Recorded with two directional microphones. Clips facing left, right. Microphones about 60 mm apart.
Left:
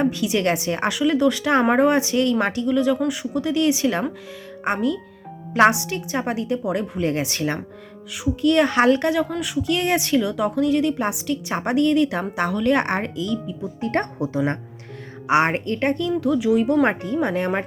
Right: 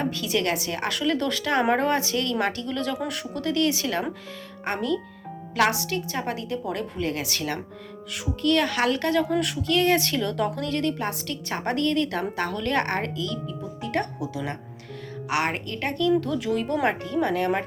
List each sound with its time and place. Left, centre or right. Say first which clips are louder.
0.0 s a woman's voice: left 5 dB; left
0.9 s a woman's voice: left 6 dB; centre
13.8 s a woman's voice: left 5 dB; left
16.2 s a woman's voice: left 7 dB; centre
16.8 s a woman's voice: left 3 dB; left